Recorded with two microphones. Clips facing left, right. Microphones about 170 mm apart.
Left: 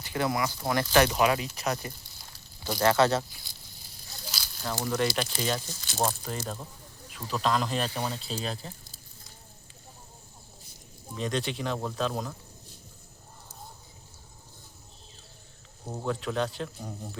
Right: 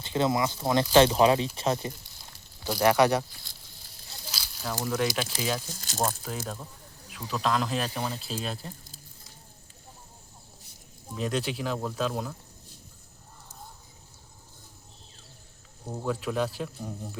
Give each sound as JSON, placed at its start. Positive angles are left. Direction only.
{"t": 0.0, "sound": "speech", "side_deg": -20}
{"t": 2.6, "sound": "speech", "side_deg": -10}
{"t": 4.4, "sound": "a sound", "side_deg": -5}
{"t": 5.4, "sound": "speech", "side_deg": -5}
{"t": 11.1, "sound": "speech", "side_deg": -5}
{"t": 15.9, "sound": "speech", "side_deg": 0}